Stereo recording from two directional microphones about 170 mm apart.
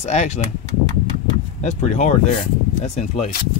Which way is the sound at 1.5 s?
40° left (ahead or behind).